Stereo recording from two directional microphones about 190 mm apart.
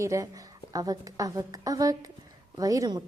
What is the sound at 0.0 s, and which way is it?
A woman's voice, 15° right (ahead or behind).